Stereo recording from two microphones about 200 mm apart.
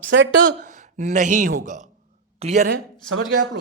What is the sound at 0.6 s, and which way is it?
A woman's voice, 40° right (ahead or behind).